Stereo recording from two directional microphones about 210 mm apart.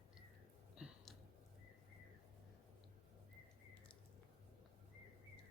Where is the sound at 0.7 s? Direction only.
5° right (ahead or behind).